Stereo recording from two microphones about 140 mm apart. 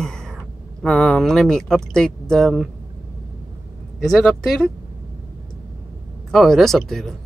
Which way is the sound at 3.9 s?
5° right (ahead or behind).